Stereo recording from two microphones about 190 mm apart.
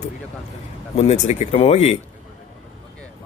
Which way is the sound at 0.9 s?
35° left (ahead or behind).